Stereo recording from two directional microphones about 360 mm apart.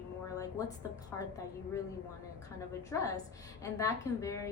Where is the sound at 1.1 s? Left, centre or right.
Centre.